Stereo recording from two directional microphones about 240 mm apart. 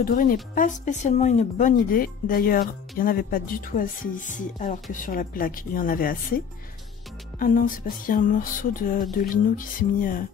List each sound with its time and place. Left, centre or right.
0.0 s speech: left